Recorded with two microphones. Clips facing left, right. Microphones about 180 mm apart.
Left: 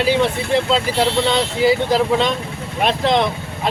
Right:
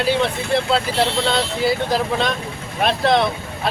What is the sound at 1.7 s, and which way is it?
Speech, 15° left (ahead or behind).